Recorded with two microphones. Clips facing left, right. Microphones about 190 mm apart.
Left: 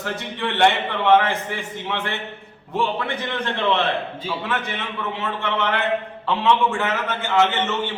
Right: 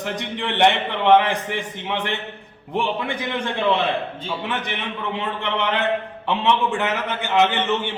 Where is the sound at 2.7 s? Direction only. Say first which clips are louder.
Even; 10° right (ahead or behind).